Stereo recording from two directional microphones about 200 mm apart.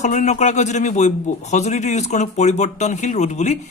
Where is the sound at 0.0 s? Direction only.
35° left (ahead or behind).